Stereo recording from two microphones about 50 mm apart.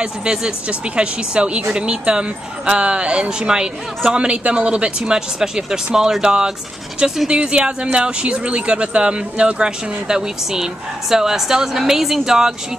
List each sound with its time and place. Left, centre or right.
0.0 s speech: centre